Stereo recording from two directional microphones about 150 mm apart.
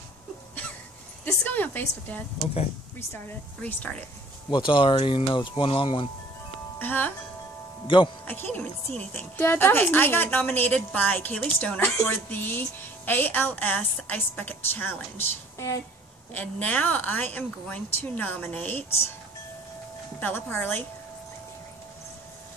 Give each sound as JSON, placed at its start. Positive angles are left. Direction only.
{"t": 1.2, "sound": "a woman's voice", "side_deg": 10}
{"t": 4.5, "sound": "speech", "side_deg": 35}
{"t": 6.8, "sound": "a woman's voice", "side_deg": 15}
{"t": 7.8, "sound": "speech", "side_deg": 35}
{"t": 8.3, "sound": "a woman's voice", "side_deg": 10}
{"t": 16.3, "sound": "a woman's voice", "side_deg": 10}
{"t": 20.2, "sound": "a woman's voice", "side_deg": 10}